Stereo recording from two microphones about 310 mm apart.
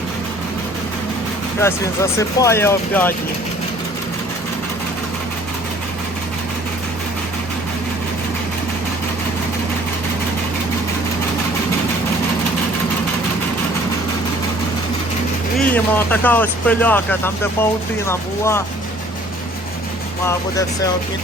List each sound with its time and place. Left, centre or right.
1.5 s speech: centre
15.5 s speech: centre
20.2 s speech: centre